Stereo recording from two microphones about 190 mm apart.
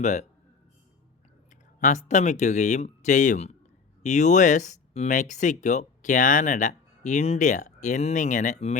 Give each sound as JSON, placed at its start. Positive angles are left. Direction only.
{"t": 0.0, "sound": "speech", "side_deg": 40}
{"t": 1.8, "sound": "speech", "side_deg": 40}